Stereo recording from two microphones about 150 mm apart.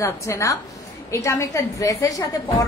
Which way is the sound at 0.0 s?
20° left (ahead or behind).